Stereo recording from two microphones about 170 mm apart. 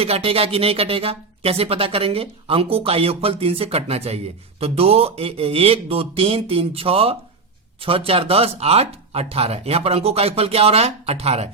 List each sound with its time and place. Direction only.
0.0 s speech: 35° right (ahead or behind)